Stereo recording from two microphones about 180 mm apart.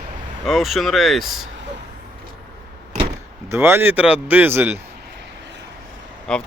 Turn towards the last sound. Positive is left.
turn(degrees=5)  # may be behind; listen again after turning